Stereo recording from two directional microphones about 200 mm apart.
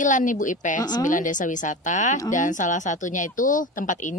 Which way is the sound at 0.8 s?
20° left (ahead or behind).